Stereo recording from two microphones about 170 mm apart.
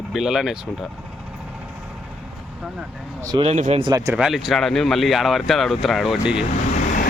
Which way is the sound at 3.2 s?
20° right (ahead or behind).